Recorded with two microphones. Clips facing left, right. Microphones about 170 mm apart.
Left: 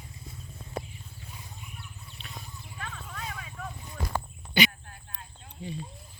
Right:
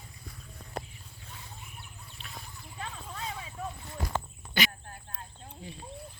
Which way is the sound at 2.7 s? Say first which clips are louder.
Right 1 dB; 25° right (ahead or behind).